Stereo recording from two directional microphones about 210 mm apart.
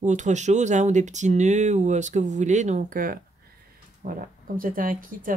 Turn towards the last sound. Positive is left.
turn(degrees=-40)  # may be behind; listen again after turning